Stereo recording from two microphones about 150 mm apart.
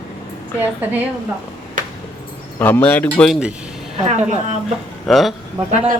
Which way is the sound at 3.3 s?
5° right (ahead or behind).